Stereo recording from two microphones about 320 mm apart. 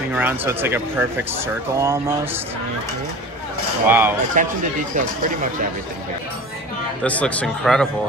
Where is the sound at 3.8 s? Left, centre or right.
Centre.